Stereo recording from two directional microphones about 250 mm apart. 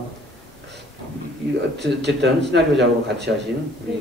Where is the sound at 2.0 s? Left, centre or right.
Right.